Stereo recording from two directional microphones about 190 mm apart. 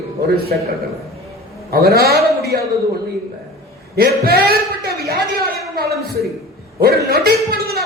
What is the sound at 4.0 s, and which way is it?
Speech, 55° right (ahead or behind).